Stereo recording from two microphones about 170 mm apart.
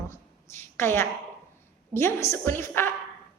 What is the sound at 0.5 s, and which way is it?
A woman's voice, 15° left (ahead or behind).